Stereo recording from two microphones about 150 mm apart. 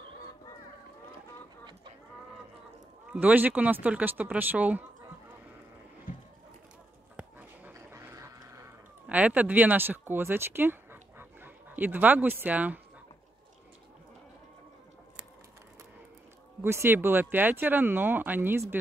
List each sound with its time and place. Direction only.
3.1 s speech: 10° right (ahead or behind)
7.2 s a sound: 10° right (ahead or behind)
9.2 s speech: 10° right (ahead or behind)
16.6 s speech: 15° right (ahead or behind)